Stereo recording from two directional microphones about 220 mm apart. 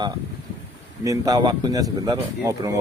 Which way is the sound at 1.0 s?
15° right (ahead or behind).